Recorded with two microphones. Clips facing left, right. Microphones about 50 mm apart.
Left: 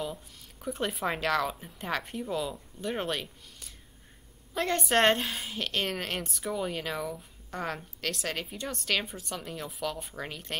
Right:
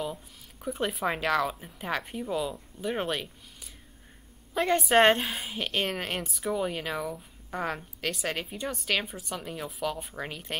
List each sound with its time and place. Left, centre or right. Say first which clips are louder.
0.0 s a woman's voice: right 2 dB; centre